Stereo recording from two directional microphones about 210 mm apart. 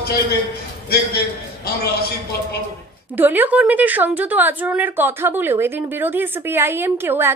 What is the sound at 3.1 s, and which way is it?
A woman's voice, 10° right (ahead or behind).